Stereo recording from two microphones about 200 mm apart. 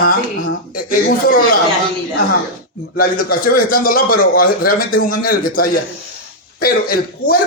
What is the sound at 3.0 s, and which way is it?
Speech, 45° left (ahead or behind).